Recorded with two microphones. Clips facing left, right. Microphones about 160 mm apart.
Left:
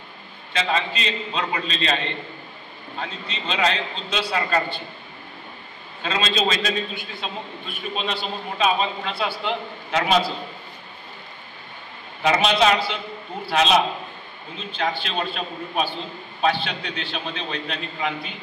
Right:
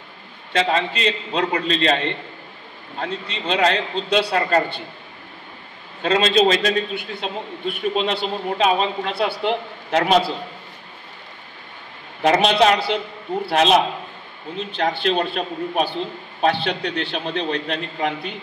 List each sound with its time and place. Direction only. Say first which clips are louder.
0.5 s a man's voice: right 4 dB; 60° right (ahead or behind)
3.0 s a man's voice: right 5 dB; 60° right (ahead or behind)
6.0 s a man's voice: right 7 dB; 60° right (ahead or behind)
12.2 s a man's voice: right 3 dB; 60° right (ahead or behind)